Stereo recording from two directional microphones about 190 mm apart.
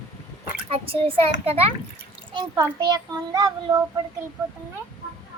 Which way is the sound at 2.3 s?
20° right (ahead or behind).